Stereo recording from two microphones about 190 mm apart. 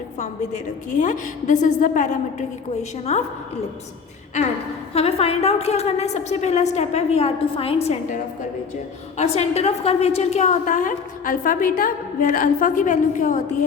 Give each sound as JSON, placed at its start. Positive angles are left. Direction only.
{"t": 0.2, "sound": "a woman's voice", "side_deg": 40}
{"t": 4.9, "sound": "a woman's voice", "side_deg": 30}